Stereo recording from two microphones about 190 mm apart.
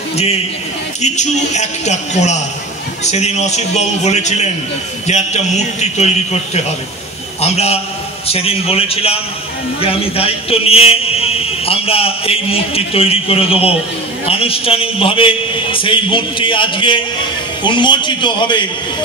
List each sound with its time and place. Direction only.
1.0 s a man's voice: 35° left (ahead or behind)